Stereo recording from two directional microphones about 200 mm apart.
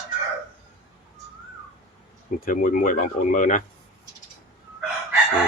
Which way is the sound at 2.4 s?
45° left (ahead or behind).